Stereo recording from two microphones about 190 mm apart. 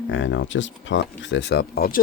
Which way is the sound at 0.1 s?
75° left (ahead or behind).